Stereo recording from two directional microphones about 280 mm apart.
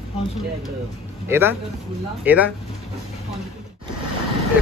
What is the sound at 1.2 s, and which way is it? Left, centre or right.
Speech, centre.